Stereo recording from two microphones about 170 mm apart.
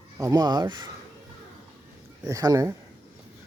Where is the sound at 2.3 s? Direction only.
20° right (ahead or behind).